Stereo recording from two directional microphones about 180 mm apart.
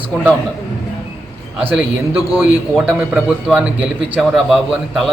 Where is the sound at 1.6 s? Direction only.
10° right (ahead or behind).